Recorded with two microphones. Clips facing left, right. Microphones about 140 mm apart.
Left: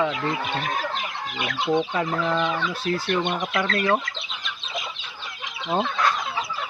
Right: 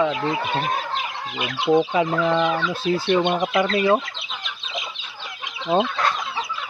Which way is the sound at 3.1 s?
25° right (ahead or behind).